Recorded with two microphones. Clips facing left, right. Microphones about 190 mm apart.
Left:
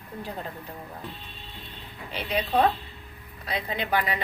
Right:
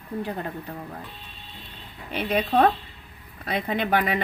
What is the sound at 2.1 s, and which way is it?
A woman's voice, 55° right (ahead or behind).